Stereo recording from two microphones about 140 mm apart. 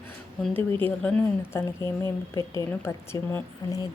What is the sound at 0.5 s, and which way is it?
Speech, 15° left (ahead or behind).